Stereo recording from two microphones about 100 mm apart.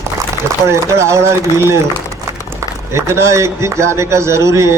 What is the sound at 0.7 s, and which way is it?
A man's voice, 30° right (ahead or behind).